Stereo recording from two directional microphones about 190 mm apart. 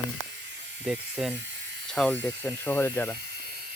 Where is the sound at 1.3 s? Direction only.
70° right (ahead or behind).